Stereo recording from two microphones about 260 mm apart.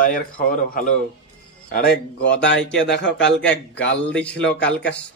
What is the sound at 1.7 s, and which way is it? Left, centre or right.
Speech, left.